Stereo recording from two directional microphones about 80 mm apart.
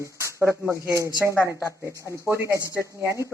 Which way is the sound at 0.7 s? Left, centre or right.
Right.